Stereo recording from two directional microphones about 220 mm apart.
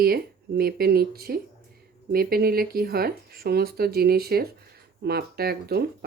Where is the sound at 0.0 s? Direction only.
45° right (ahead or behind).